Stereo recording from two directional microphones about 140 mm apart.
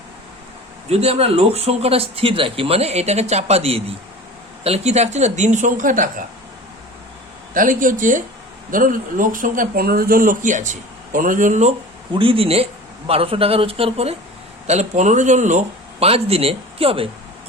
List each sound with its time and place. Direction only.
0.9 s speech: 45° right (ahead or behind); by 6.2 s 70° right (ahead or behind)
7.5 s speech: 75° right (ahead or behind)
12.1 s a man's voice: 40° right (ahead or behind)